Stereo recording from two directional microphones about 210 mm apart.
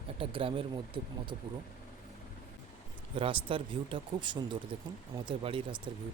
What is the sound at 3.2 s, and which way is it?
Speech, 25° right (ahead or behind).